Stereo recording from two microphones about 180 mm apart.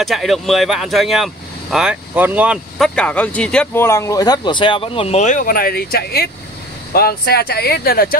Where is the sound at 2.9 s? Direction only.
5° left (ahead or behind).